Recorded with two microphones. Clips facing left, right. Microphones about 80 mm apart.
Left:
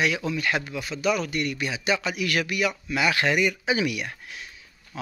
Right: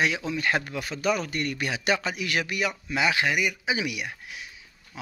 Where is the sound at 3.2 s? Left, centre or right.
Centre.